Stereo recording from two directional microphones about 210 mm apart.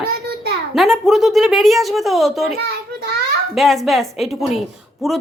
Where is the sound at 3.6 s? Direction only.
Centre (ahead or behind).